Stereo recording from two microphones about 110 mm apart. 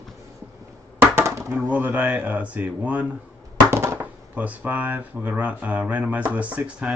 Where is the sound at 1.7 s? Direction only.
15° right (ahead or behind).